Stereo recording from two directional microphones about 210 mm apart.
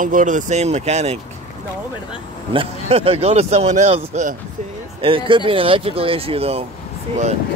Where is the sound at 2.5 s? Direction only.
25° right (ahead or behind).